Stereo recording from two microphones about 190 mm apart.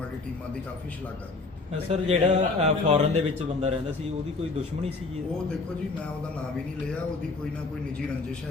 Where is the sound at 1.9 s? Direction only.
35° right (ahead or behind).